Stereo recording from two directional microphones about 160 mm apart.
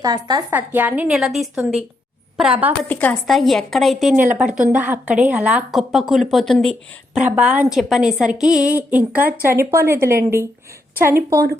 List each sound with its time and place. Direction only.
0.0 s a woman's voice: 25° right (ahead or behind)
0.5 s a woman's voice: 10° right (ahead or behind)
2.8 s a woman's voice: 10° left (ahead or behind)
4.1 s a woman's voice: 10° right (ahead or behind)
7.3 s a woman's voice: 10° right (ahead or behind)